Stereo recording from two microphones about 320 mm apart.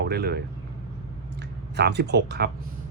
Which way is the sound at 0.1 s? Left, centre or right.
Right.